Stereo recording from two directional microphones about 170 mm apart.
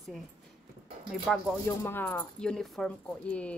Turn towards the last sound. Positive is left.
turn(degrees=5)  # may be behind; listen again after turning